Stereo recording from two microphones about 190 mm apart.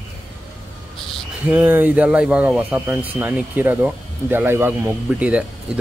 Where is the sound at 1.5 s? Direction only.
10° right (ahead or behind).